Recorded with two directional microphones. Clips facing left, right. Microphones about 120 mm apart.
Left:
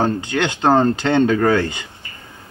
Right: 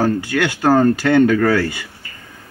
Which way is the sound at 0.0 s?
20° left (ahead or behind).